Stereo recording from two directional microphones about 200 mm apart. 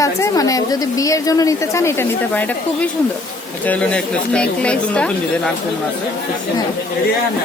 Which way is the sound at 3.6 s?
5° left (ahead or behind).